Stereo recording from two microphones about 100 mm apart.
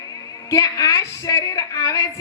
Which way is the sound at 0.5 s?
35° left (ahead or behind).